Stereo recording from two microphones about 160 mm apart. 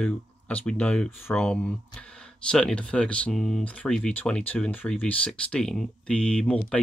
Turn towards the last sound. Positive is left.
turn(degrees=5)  # may be behind; listen again after turning